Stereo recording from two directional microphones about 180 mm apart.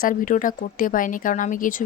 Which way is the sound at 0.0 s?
50° left (ahead or behind).